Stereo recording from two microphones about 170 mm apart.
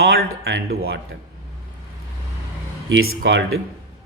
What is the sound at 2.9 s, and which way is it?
Speech, 90° right.